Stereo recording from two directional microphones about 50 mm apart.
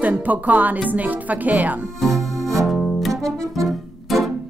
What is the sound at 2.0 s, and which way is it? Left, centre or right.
Music, centre.